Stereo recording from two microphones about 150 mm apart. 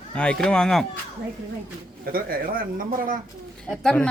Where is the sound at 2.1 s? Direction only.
75° right (ahead or behind).